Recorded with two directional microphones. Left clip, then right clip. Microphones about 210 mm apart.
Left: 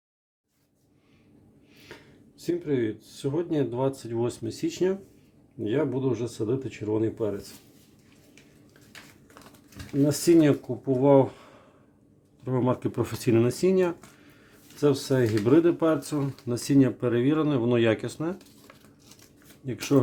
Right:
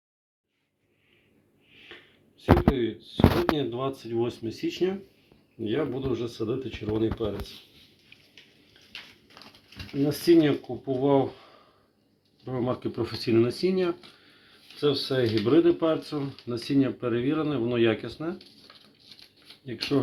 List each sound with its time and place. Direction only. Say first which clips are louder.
2.4 s speech: right 4 dB; 55° left (ahead or behind)
10.1 s speech: even; 45° left (ahead or behind)
12.5 s speech: left 3 dB; 45° left (ahead or behind)
19.6 s speech: left 3 dB; 50° left (ahead or behind)